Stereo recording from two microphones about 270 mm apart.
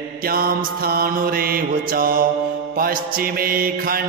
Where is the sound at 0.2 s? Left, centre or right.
Right.